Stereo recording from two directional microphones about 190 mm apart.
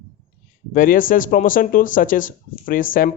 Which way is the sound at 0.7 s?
45° left (ahead or behind).